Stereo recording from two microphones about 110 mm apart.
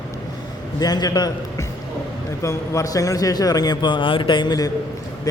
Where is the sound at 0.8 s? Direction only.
35° left (ahead or behind).